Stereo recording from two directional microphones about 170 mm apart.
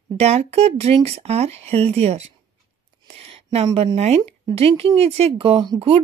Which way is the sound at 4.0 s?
40° right (ahead or behind).